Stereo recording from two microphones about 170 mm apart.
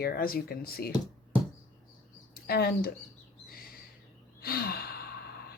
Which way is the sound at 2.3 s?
65° left (ahead or behind).